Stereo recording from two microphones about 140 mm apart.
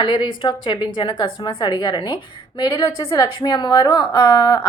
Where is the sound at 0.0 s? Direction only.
35° left (ahead or behind).